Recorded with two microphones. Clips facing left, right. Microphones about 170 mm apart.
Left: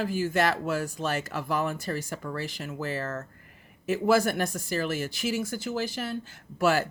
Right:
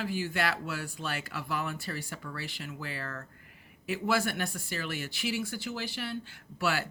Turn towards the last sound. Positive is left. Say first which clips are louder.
# left 7 dB
turn(degrees=45)  # may be behind; listen again after turning